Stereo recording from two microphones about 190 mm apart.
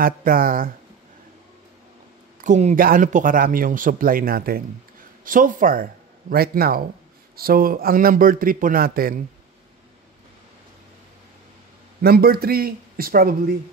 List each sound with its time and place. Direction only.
0.0 s speech: 50° right (ahead or behind)
2.4 s speech: 40° right (ahead or behind)
12.0 s speech: 55° right (ahead or behind)